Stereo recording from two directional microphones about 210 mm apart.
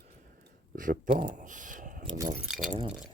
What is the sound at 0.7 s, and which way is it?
Speech, 40° right (ahead or behind).